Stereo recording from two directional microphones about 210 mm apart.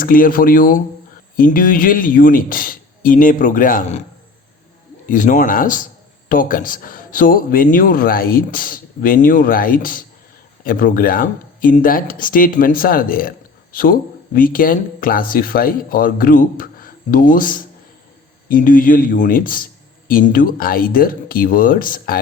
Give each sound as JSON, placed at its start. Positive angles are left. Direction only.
{"t": 0.0, "sound": "a man's voice", "side_deg": 40}
{"t": 5.0, "sound": "a man's voice", "side_deg": 40}